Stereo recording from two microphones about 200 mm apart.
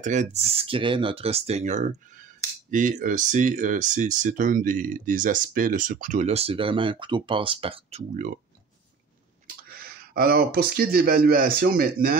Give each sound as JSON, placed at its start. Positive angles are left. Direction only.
{"t": 0.0, "sound": "speech", "side_deg": -35}
{"t": 9.7, "sound": "speech", "side_deg": -50}